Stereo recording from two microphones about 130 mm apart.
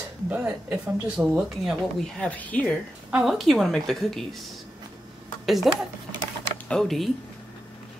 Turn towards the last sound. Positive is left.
turn(degrees=0)  # may be behind; listen again after turning